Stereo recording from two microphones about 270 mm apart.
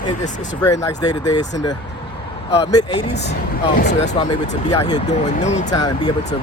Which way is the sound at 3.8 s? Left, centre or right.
Left.